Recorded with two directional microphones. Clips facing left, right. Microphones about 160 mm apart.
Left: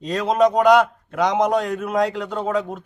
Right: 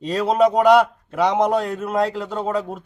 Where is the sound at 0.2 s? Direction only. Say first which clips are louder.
Right 1 dB; 5° right (ahead or behind).